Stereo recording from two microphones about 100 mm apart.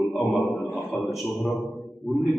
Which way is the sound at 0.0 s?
Centre (ahead or behind).